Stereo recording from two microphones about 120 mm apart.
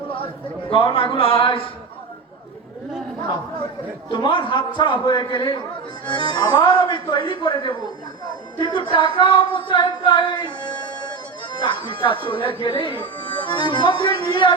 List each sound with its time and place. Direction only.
0.7 s a man's voice: 50° left (ahead or behind)
4.1 s speech: 40° left (ahead or behind)